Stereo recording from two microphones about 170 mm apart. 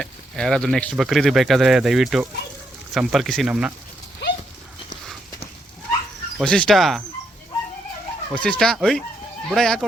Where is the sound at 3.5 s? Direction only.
10° right (ahead or behind).